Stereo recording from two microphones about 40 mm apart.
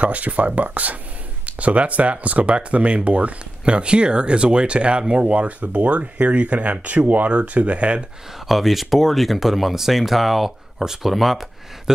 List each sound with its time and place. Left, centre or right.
0.0 s speech: right
8.5 s speech: centre